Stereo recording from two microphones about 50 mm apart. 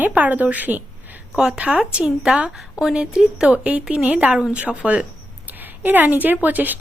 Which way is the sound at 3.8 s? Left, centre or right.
Centre.